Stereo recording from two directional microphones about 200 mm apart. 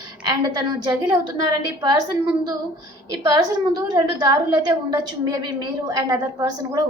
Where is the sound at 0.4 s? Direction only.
20° right (ahead or behind).